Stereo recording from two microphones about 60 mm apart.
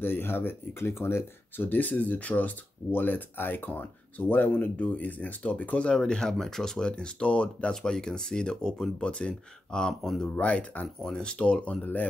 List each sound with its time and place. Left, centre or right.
0.0 s speech: left; by 6.9 s centre
6.9 s speech: centre
10.3 s speech: left
11.1 s speech: centre
11.6 s speech: left